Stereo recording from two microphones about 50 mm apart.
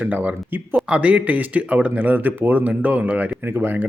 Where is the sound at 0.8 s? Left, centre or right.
Right.